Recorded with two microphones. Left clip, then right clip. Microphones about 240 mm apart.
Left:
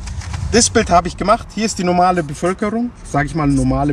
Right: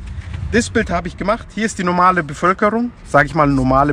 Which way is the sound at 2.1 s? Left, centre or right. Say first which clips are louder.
Right 3 dB; right.